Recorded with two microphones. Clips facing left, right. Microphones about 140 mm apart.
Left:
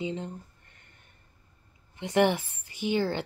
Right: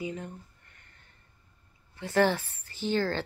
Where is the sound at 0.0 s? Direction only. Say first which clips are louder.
Left 3 dB; 25° left (ahead or behind).